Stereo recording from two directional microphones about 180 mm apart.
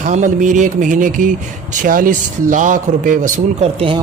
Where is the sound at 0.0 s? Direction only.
45° right (ahead or behind).